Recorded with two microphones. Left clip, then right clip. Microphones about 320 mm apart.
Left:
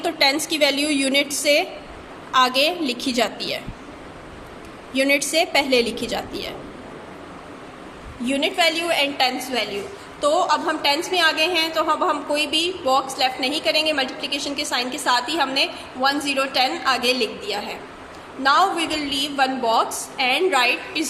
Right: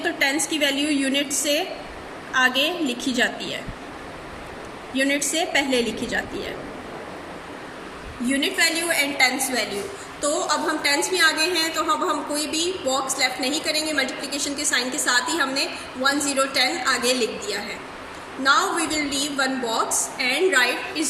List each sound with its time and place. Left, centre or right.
0.3 s a woman's voice: centre
2.8 s a woman's voice: centre
4.9 s a woman's voice: centre
8.2 s a woman's voice: centre